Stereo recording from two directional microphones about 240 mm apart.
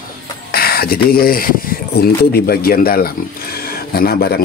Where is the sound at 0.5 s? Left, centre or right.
Left.